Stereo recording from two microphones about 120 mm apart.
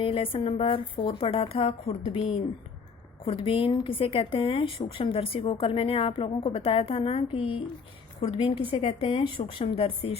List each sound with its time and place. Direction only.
0.0 s a woman's voice: 50° left (ahead or behind)
3.2 s a woman's voice: 45° left (ahead or behind)